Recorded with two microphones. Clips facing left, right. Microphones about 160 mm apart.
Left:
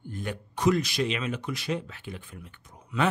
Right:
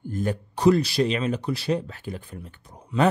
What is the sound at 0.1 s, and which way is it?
Speech, 35° right (ahead or behind).